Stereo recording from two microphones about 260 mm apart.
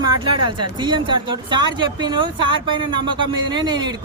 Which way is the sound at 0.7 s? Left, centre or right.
Centre.